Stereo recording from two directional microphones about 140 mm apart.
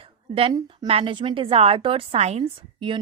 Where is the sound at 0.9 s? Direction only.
40° right (ahead or behind).